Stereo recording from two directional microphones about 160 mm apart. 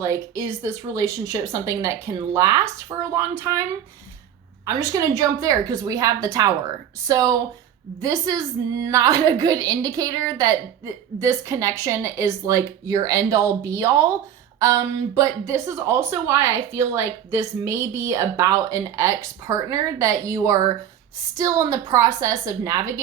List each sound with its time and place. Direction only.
0.0 s a woman's voice: 20° right (ahead or behind)
4.6 s a woman's voice: 20° right (ahead or behind)